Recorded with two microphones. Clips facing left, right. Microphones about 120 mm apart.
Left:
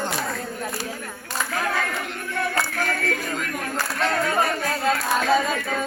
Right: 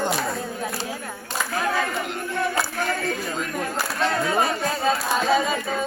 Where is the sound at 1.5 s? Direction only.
25° right (ahead or behind).